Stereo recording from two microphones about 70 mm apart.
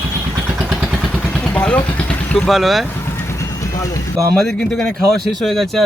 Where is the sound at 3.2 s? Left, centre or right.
Left.